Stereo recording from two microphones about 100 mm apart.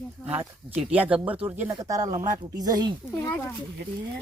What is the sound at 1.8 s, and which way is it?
Speech, 35° right (ahead or behind).